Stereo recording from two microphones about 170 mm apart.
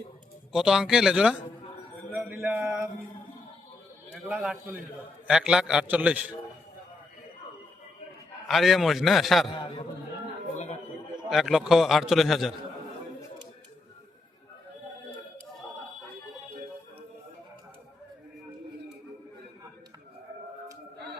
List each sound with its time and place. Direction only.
0.5 s a man's voice: 5° right (ahead or behind)
2.4 s a man's voice: 5° right (ahead or behind)
4.1 s a man's voice: centre (ahead or behind)
8.4 s a man's voice: centre (ahead or behind)
9.6 s a man's voice: 30° left (ahead or behind)
11.3 s a man's voice: centre (ahead or behind)